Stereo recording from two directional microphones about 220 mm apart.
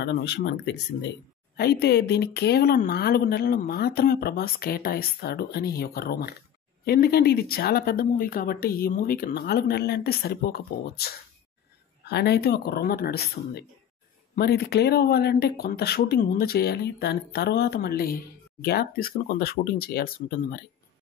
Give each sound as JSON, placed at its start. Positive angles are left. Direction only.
{"t": 0.0, "sound": "speech", "side_deg": 50}